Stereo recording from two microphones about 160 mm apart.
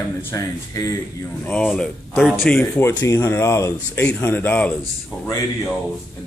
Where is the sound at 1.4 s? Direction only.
10° left (ahead or behind).